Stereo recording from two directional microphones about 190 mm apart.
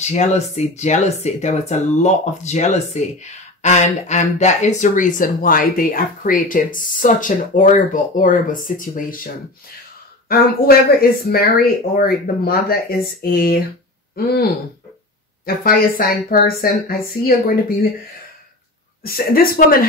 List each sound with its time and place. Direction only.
0.0 s speech: 35° left (ahead or behind)
19.0 s speech: 50° left (ahead or behind)